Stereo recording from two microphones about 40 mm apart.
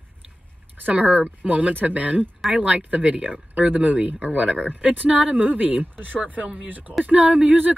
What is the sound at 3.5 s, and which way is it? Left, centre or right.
Speech, right.